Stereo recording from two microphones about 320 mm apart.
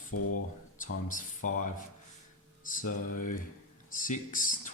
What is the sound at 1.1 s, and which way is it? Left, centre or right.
Speech, left.